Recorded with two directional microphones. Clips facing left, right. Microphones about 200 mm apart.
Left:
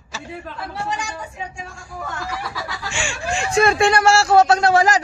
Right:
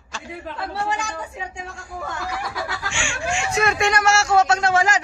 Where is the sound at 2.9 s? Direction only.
35° left (ahead or behind).